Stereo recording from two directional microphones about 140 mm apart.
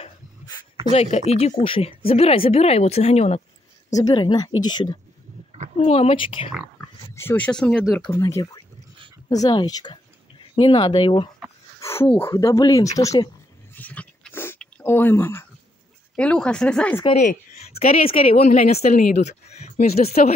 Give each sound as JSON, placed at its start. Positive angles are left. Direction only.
{"t": 0.9, "sound": "speech", "side_deg": 50}
{"t": 3.9, "sound": "speech", "side_deg": 30}
{"t": 5.8, "sound": "speech", "side_deg": 45}
{"t": 7.2, "sound": "speech", "side_deg": 15}
{"t": 8.0, "sound": "speech", "side_deg": 20}
{"t": 11.8, "sound": "a sound", "side_deg": 20}
{"t": 12.1, "sound": "speech", "side_deg": 15}
{"t": 13.7, "sound": "a sound", "side_deg": 10}
{"t": 16.2, "sound": "speech", "side_deg": 5}
{"t": 17.2, "sound": "a woman's voice", "side_deg": 55}
{"t": 18.8, "sound": "a woman's voice", "side_deg": 80}
{"t": 19.1, "sound": "speech", "side_deg": 55}
{"t": 20.2, "sound": "a woman's voice", "side_deg": 85}